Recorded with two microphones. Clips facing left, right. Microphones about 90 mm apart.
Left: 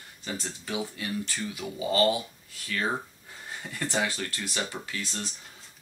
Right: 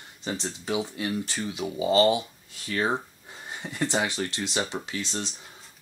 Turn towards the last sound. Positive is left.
turn(degrees=-20)  # may be behind; listen again after turning